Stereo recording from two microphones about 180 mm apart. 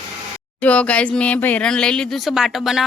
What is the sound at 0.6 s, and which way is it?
Speech, 5° left (ahead or behind).